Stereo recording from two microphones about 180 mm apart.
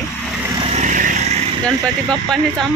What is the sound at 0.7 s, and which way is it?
Vehicle, 45° right (ahead or behind).